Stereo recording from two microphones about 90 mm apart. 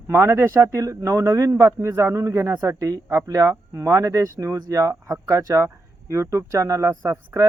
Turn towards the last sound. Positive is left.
turn(degrees=-30)  # may be behind; listen again after turning